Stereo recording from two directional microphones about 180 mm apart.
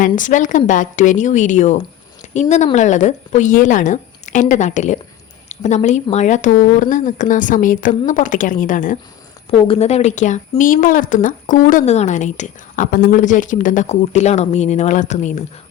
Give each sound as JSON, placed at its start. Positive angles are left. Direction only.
{"t": 0.0, "sound": "speech", "side_deg": 45}
{"t": 9.5, "sound": "speech", "side_deg": 35}